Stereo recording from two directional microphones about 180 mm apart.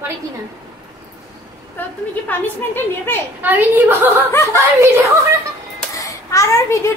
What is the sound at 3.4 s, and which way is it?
Speech, 10° right (ahead or behind).